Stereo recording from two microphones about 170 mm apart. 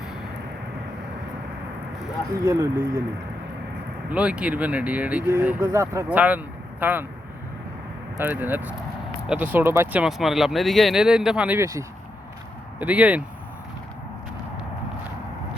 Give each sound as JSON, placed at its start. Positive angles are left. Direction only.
{"t": 2.3, "sound": "speech", "side_deg": -20}
{"t": 4.1, "sound": "speech", "side_deg": -5}
{"t": 8.2, "sound": "speech", "side_deg": -10}